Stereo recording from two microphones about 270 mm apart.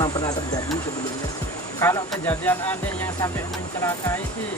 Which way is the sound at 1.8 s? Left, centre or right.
Centre.